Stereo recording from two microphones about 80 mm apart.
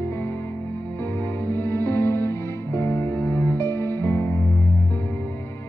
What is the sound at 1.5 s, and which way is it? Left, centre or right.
Music, left.